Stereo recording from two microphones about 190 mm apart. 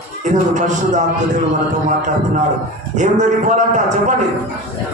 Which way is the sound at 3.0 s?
40° right (ahead or behind).